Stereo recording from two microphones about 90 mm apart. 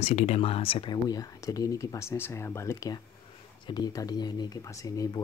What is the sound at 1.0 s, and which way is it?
Speech, 45° left (ahead or behind).